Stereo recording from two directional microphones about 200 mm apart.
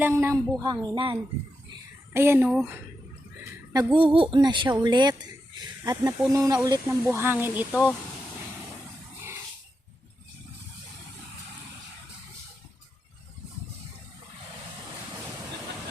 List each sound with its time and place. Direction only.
0.0 s a woman's voice: 10° right (ahead or behind)
2.1 s a woman's voice: 10° right (ahead or behind)
3.7 s a woman's voice: 15° right (ahead or behind)